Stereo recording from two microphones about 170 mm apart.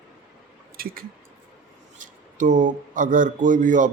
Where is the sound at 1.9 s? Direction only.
50° right (ahead or behind).